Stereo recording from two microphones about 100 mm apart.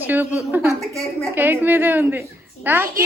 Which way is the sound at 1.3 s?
20° right (ahead or behind).